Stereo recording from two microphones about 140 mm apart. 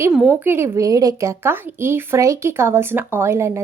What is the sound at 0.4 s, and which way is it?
A woman's voice, 15° right (ahead or behind).